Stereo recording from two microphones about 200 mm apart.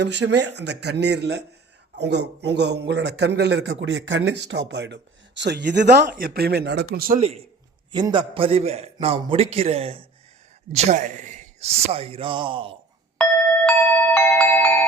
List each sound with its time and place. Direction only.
0.0 s a man's voice: 60° right (ahead or behind)
7.9 s a man's voice: 20° right (ahead or behind)
13.7 s glockenspiel: 5° left (ahead or behind)